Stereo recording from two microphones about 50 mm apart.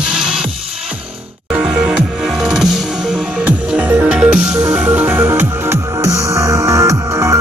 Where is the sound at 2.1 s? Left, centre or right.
Centre.